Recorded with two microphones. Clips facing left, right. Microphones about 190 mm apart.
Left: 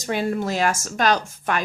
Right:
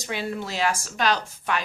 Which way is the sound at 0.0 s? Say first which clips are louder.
Left 6 dB; 45° left (ahead or behind).